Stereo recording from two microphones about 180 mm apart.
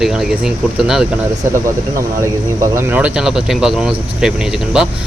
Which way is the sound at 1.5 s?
15° right (ahead or behind).